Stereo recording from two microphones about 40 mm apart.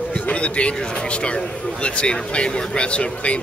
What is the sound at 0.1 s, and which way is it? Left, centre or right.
A man's voice, left.